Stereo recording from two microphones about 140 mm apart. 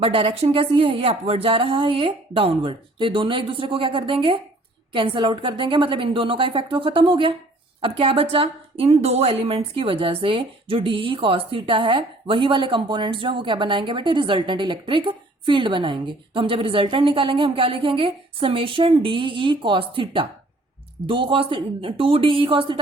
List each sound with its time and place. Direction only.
0.0 s a woman's voice: 40° right (ahead or behind)